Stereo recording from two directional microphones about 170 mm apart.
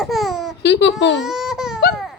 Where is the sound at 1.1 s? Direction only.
Centre (ahead or behind).